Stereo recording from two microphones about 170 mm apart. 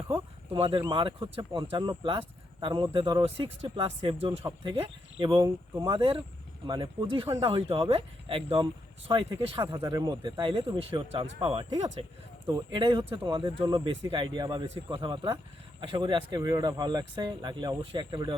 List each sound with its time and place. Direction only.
0.5 s speech: 30° right (ahead or behind)
6.0 s speech: 35° right (ahead or behind)
9.7 s speech: 20° right (ahead or behind)